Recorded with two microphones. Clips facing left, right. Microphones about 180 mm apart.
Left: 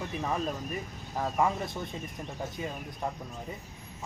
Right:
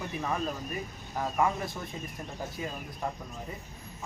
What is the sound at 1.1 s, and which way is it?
Speech, centre (ahead or behind).